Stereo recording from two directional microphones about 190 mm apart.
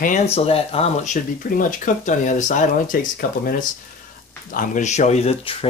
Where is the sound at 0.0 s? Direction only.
35° left (ahead or behind).